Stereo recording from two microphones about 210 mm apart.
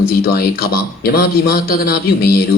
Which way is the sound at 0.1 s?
45° left (ahead or behind).